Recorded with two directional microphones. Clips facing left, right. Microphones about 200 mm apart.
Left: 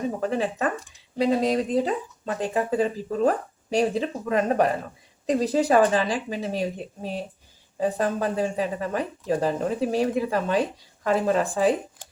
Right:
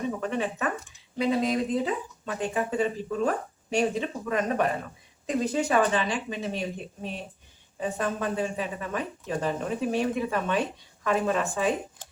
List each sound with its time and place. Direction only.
0.2 s speech: 35° left (ahead or behind)